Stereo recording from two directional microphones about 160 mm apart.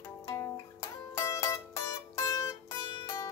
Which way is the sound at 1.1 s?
20° left (ahead or behind).